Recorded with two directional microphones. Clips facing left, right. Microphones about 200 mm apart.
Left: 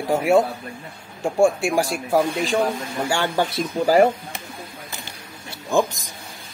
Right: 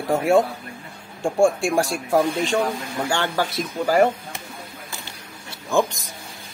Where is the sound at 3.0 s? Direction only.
10° left (ahead or behind).